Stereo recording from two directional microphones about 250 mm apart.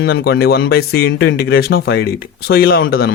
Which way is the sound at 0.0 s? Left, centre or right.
Left.